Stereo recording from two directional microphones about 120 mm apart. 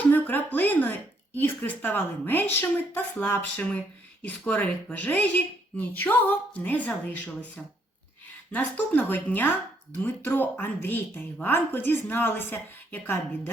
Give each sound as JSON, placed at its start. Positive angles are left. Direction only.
{"t": 0.1, "sound": "speech", "side_deg": 15}